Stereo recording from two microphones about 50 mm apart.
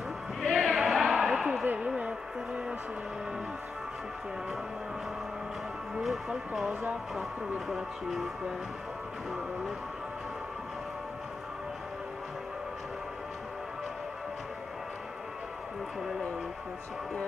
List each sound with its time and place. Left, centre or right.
0.4 s music: centre
0.7 s a sound: centre
2.0 s music: right
5.9 s speech: centre